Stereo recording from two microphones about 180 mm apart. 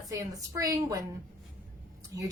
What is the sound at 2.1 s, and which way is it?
Speech, 20° right (ahead or behind).